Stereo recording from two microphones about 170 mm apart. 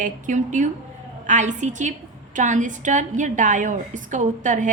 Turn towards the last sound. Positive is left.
turn(degrees=-45)  # may be behind; listen again after turning